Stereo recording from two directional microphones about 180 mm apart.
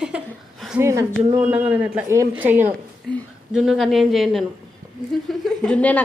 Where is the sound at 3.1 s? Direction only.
5° left (ahead or behind).